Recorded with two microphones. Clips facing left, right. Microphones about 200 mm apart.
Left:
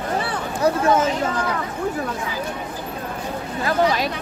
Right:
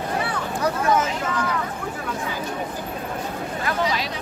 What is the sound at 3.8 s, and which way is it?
Speech, 50° left (ahead or behind).